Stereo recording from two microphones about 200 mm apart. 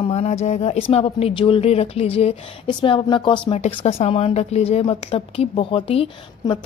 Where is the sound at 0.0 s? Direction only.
30° left (ahead or behind).